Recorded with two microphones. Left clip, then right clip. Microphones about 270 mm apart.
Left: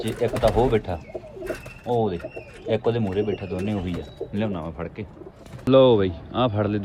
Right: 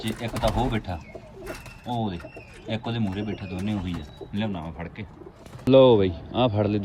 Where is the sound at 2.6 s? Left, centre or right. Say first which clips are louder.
Left 8 dB; centre.